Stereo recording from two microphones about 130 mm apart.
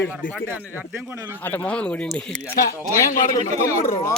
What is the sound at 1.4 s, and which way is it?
Speech, 15° left (ahead or behind).